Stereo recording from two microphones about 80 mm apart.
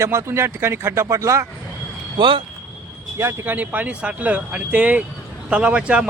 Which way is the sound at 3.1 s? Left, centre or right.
Right.